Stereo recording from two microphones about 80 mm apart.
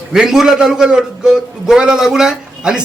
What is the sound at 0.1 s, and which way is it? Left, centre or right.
A man's voice, centre.